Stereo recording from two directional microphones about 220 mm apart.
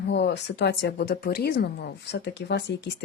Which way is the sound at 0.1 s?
50° left (ahead or behind).